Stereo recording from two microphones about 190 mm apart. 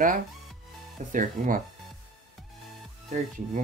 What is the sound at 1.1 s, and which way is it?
Speech, 45° right (ahead or behind).